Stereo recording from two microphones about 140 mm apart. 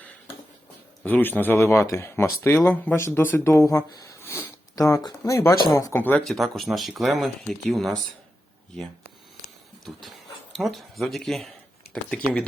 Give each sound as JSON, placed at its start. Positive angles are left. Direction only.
{"t": 1.0, "sound": "speech", "side_deg": 15}
{"t": 6.2, "sound": "speech", "side_deg": 0}
{"t": 9.8, "sound": "speech", "side_deg": 0}